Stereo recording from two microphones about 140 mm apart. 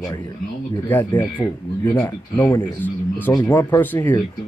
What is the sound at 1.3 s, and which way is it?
Speech, 15° left (ahead or behind).